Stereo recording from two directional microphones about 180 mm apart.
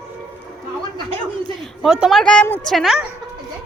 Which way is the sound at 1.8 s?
5° right (ahead or behind).